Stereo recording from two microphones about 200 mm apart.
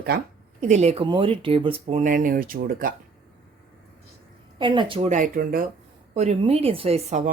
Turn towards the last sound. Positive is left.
turn(degrees=-35)  # may be behind; listen again after turning